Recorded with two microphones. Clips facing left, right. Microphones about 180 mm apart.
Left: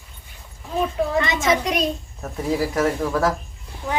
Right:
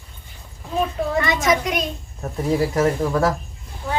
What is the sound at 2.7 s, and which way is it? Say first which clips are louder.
Speech: right 2 dB; 5° right (ahead or behind).